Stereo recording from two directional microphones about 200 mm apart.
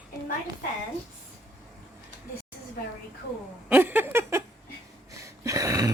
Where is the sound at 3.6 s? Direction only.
10° right (ahead or behind).